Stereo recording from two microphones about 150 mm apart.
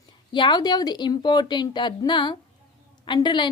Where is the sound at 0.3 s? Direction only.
30° left (ahead or behind).